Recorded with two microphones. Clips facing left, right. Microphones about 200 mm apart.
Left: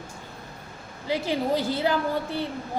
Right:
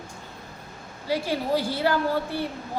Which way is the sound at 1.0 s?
20° left (ahead or behind).